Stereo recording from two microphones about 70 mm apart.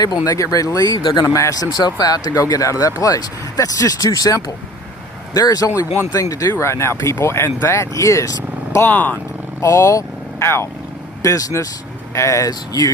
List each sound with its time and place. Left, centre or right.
0.3 s speech: left
1.3 s speech: left
1.7 s speech: left
6.5 s speech: left
8.9 s speech: left
9.6 s speech: left
11.2 s speech: left
12.1 s speech: left
12.5 s speech: left